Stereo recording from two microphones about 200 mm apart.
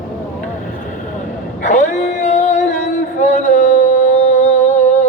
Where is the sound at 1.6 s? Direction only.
35° left (ahead or behind).